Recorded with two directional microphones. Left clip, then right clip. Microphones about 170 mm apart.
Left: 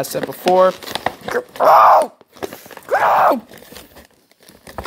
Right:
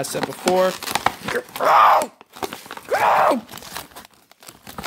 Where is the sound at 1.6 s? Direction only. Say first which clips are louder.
Left 5 dB; centre (ahead or behind).